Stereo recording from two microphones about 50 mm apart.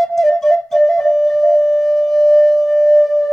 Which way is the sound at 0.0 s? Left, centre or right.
Centre.